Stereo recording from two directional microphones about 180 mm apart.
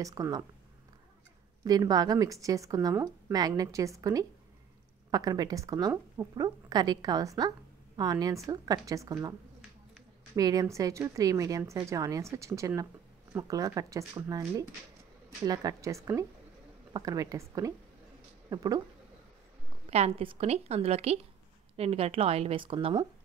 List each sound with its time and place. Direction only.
0.0 s speech: 20° right (ahead or behind)
1.6 s speech: 20° right (ahead or behind)
10.3 s speech: 20° right (ahead or behind)
19.9 s a woman's voice: 35° right (ahead or behind)